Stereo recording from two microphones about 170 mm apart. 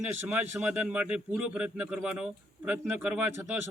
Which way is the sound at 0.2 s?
10° right (ahead or behind).